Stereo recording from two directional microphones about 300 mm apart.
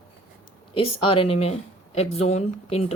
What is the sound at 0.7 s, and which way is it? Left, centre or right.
A woman's voice, centre.